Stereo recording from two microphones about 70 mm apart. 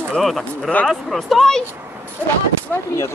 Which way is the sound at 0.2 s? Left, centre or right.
Centre.